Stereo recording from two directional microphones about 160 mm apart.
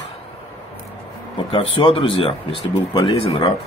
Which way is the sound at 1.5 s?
35° left (ahead or behind).